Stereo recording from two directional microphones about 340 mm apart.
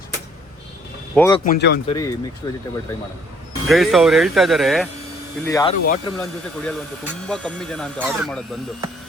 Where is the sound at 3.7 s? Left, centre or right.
Centre.